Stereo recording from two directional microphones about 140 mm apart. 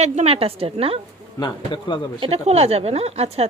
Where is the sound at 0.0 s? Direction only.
50° right (ahead or behind).